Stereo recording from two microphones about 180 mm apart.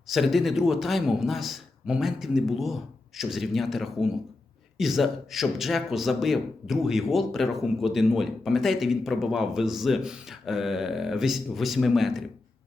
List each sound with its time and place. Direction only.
0.1 s a man's voice: centre (ahead or behind)